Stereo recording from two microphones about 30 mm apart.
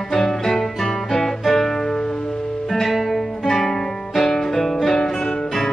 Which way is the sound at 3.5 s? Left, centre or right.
Centre.